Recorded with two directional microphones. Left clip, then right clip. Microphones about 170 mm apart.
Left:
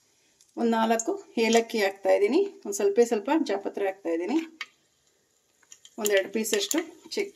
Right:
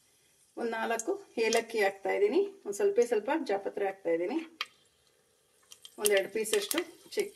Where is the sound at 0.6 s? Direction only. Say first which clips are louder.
Left 8 dB; 70° left (ahead or behind).